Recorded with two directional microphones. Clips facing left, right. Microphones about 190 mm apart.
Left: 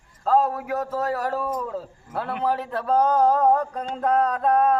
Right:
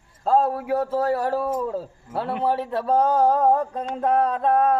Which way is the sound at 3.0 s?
10° right (ahead or behind).